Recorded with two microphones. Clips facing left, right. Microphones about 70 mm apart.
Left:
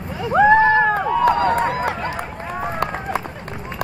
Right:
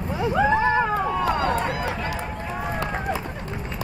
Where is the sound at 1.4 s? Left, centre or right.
Left.